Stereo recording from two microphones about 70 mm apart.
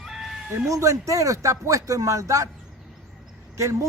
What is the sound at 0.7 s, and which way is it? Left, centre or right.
A man's voice, right.